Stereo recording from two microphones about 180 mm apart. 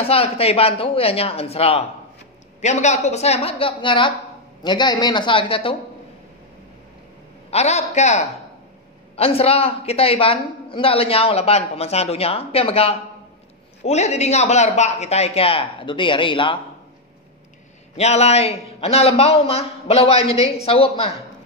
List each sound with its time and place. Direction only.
0.0 s a woman's voice: 35° left (ahead or behind)
7.5 s a woman's voice: 40° left (ahead or behind)
17.9 s a woman's voice: 35° left (ahead or behind)